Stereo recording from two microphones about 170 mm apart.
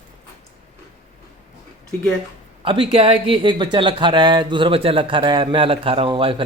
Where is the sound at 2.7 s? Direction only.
30° right (ahead or behind).